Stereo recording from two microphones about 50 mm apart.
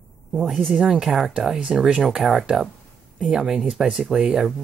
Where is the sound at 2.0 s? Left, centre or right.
Centre.